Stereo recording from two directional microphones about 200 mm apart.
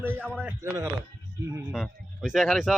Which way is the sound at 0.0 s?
10° right (ahead or behind).